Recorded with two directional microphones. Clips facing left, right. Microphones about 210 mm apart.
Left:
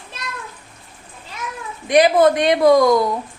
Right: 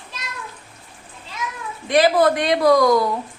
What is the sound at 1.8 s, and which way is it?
Speech, 20° left (ahead or behind).